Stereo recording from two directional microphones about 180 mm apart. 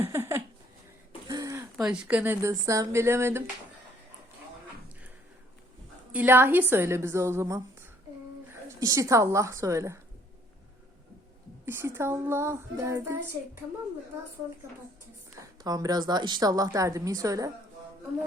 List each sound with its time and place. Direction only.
0.0 s a sound: 15° right (ahead or behind)
1.8 s a woman's voice: 5° right (ahead or behind)
6.1 s a woman's voice: 10° right (ahead or behind)
11.6 s a woman's voice: 15° right (ahead or behind)
15.4 s a woman's voice: 20° right (ahead or behind)